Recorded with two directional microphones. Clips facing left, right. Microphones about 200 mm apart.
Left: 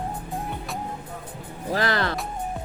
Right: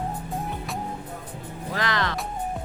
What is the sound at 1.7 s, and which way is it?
Music, 35° left (ahead or behind).